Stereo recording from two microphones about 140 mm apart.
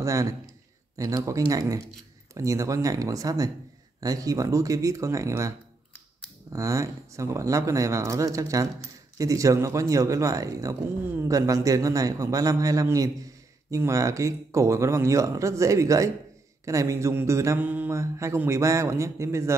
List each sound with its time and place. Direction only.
0.0 s speech: 25° right (ahead or behind)
6.5 s speech: 20° right (ahead or behind)